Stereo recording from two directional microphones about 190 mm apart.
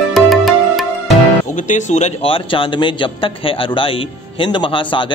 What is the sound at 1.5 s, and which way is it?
A man's voice, 40° left (ahead or behind).